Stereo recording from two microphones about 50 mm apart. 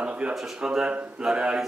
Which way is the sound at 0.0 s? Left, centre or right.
Right.